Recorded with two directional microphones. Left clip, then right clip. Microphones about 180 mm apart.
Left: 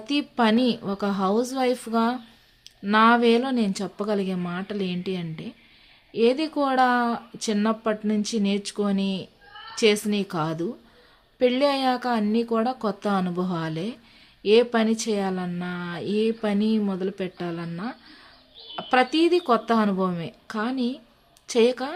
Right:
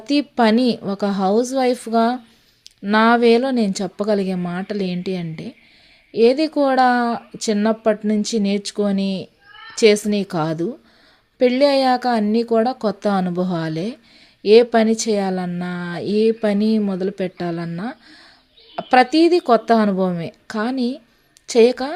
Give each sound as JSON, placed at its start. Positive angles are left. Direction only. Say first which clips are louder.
{"t": 0.0, "sound": "speech", "louder": "right 6 dB", "side_deg": -30}